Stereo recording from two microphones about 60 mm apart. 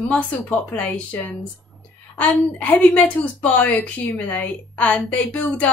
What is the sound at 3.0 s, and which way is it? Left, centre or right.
Speech, left.